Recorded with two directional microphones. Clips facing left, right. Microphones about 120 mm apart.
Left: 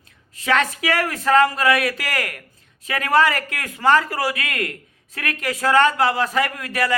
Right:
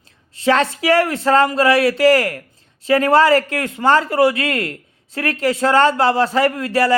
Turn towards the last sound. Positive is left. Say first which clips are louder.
# right 7 dB
turn(degrees=-30)  # may be behind; listen again after turning